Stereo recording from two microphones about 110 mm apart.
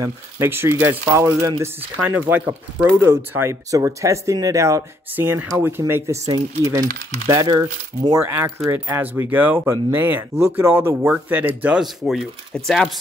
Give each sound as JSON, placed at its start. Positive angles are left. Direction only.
{"t": 0.0, "sound": "speech", "side_deg": -20}
{"t": 5.1, "sound": "speech", "side_deg": -20}
{"t": 11.8, "sound": "speech", "side_deg": 0}